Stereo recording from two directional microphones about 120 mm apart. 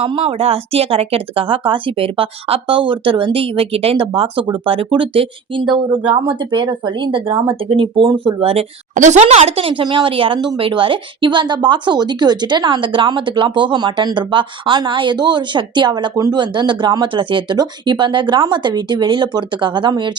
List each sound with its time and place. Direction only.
0.0 s speech: 50° right (ahead or behind)